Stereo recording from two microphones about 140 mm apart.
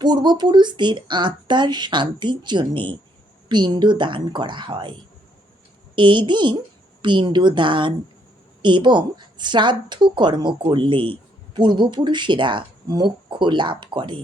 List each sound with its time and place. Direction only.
0.0 s a woman's voice: 30° right (ahead or behind)
6.0 s a woman's voice: 35° right (ahead or behind)